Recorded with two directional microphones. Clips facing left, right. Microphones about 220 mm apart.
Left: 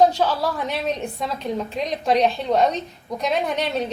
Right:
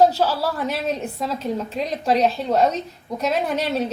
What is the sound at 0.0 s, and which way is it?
A woman's voice, 5° right (ahead or behind).